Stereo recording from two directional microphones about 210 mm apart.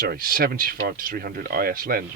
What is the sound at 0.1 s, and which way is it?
Speech, 45° right (ahead or behind).